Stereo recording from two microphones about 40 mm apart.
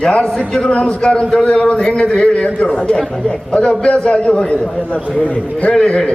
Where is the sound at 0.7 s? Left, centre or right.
Left.